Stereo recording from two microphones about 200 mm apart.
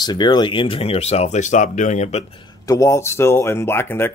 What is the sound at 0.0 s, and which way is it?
Speech, 20° left (ahead or behind).